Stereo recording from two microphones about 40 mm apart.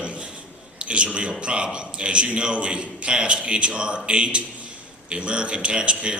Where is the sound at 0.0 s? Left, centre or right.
Right.